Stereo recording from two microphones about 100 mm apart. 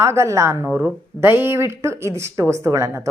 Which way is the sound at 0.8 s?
20° right (ahead or behind).